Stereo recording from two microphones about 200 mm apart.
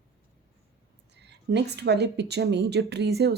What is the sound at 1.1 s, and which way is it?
A woman's voice, 55° right (ahead or behind).